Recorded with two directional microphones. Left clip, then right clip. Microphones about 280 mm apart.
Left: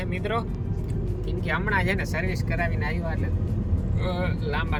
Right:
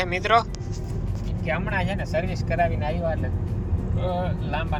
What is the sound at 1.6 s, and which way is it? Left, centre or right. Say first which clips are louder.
Speech: left 6 dB; left.